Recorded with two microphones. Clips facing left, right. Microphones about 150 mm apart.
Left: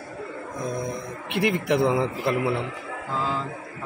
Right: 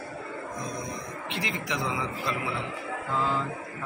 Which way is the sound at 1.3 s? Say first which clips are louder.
Left 11 dB; 60° left (ahead or behind).